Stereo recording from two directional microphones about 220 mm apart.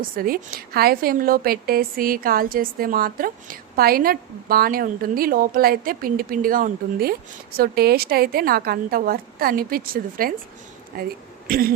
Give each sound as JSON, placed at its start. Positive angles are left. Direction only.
{"t": 0.2, "sound": "a woman's voice", "side_deg": -40}